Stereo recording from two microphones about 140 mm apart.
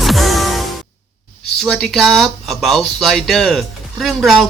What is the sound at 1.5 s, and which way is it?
Speech, centre (ahead or behind).